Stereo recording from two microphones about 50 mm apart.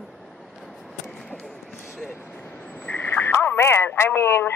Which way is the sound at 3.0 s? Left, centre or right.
Left.